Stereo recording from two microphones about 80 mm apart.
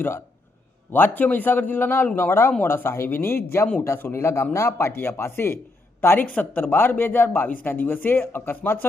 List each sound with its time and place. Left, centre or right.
0.9 s speech: left
6.1 s speech: centre